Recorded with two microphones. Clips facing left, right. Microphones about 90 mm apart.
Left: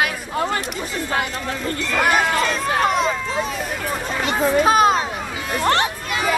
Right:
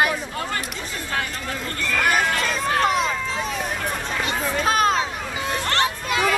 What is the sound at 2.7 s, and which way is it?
Run, centre (ahead or behind).